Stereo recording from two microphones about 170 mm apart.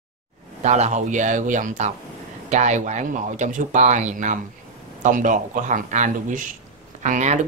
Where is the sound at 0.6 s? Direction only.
40° right (ahead or behind).